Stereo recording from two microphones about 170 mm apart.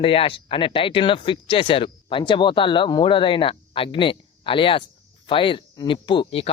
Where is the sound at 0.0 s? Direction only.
30° left (ahead or behind).